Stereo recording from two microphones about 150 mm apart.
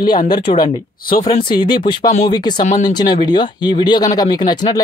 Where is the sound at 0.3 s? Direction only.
30° left (ahead or behind).